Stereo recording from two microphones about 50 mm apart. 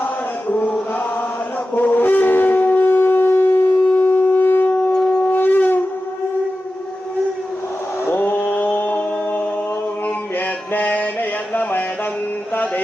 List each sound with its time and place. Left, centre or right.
0.0 s chant: left
1.7 s shofar: left
4.7 s shofar: centre
5.2 s shofar: left
8.0 s mantra: left
10.8 s mantra: left